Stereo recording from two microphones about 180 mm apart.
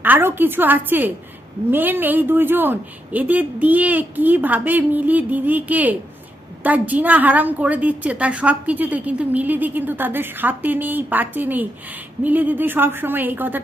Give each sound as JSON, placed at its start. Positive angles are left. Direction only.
{"t": 0.0, "sound": "a woman's voice", "side_deg": -10}